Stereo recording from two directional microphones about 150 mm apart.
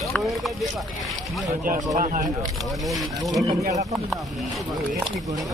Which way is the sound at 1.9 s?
60° right (ahead or behind).